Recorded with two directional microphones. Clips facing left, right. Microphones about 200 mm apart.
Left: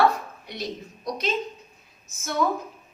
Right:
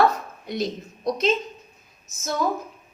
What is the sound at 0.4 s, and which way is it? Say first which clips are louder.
Speech: right 8 dB; 50° right (ahead or behind).